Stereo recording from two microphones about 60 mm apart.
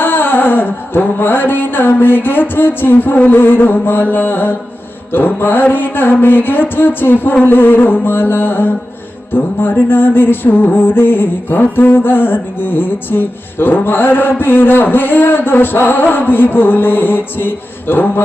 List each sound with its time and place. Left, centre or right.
0.0 s music: left